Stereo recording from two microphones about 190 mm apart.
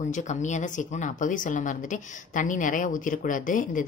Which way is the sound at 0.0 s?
40° left (ahead or behind).